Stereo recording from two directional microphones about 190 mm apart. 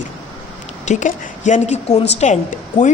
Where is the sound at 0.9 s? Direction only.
40° left (ahead or behind).